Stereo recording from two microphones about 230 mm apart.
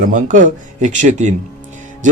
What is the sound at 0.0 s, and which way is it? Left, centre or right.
A man's voice, right.